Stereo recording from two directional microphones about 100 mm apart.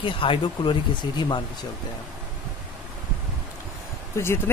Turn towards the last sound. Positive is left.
turn(degrees=25)  # may be behind; listen again after turning